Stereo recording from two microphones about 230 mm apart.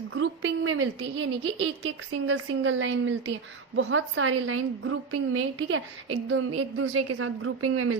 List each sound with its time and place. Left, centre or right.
0.1 s a woman's voice: right